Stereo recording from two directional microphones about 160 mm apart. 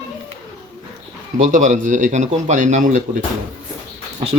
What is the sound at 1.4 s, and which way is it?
Speech, 50° right (ahead or behind).